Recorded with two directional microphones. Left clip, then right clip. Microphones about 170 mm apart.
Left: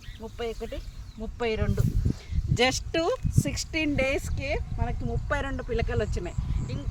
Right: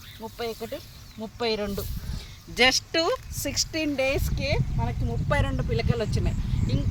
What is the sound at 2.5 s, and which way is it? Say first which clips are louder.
Speech: right 4 dB; 35° left (ahead or behind).